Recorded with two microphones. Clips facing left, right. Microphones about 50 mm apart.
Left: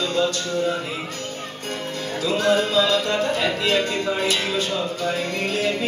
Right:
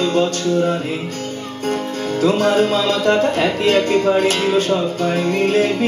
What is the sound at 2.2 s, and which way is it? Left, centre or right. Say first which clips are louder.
Speech: right 5 dB; right.